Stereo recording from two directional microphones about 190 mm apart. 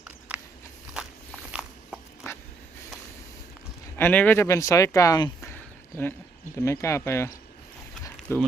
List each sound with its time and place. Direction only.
1.5 s walk: centre (ahead or behind)
3.9 s speech: 10° left (ahead or behind)
6.6 s speech: 15° left (ahead or behind)
8.3 s speech: 15° left (ahead or behind)